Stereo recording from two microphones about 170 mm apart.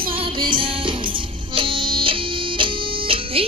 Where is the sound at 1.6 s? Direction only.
30° right (ahead or behind).